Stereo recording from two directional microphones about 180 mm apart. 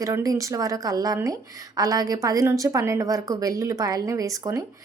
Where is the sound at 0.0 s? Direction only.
20° right (ahead or behind).